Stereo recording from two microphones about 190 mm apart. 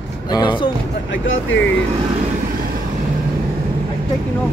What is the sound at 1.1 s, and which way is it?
Speech, 75° left (ahead or behind).